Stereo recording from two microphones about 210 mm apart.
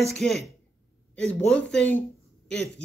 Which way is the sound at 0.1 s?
Centre (ahead or behind).